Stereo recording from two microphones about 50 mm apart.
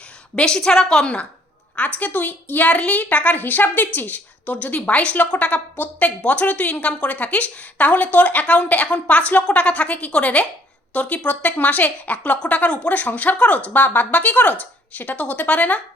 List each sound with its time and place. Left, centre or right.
0.3 s a woman's voice: centre
1.0 s a woman's voice: left
2.0 s a woman's voice: left